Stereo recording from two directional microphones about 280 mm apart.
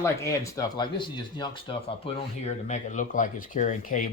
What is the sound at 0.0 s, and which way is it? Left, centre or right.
Speech, centre.